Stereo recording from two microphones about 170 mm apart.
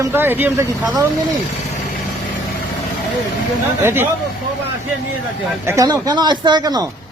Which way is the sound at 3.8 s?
15° right (ahead or behind).